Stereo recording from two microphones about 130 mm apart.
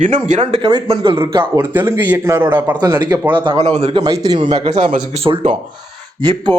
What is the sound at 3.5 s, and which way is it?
Speech, 55° right (ahead or behind).